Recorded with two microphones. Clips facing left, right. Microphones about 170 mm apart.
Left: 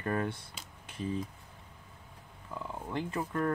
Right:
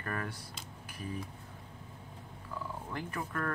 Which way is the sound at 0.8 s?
25° left (ahead or behind).